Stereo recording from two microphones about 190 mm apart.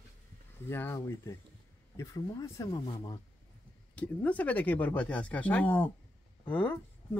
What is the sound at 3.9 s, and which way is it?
Speech, 5° left (ahead or behind).